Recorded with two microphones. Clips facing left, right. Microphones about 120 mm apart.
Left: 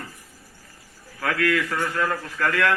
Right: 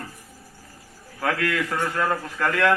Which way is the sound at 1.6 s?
20° right (ahead or behind).